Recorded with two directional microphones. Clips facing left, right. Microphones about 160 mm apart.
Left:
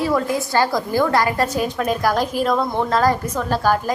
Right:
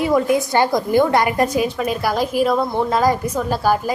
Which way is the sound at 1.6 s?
5° right (ahead or behind).